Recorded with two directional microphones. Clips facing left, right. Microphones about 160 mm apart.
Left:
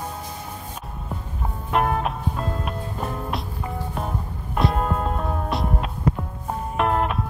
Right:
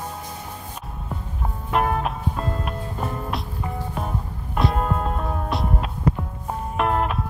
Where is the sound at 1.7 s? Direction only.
Centre (ahead or behind).